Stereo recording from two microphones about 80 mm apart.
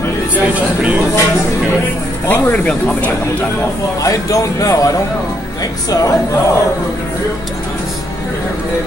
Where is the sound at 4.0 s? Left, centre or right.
Left.